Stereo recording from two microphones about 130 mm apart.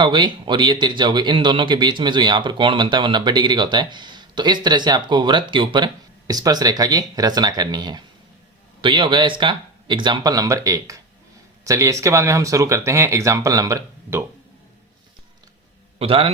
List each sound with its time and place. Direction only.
0.0 s a man's voice: 40° right (ahead or behind)
16.0 s a man's voice: 45° right (ahead or behind)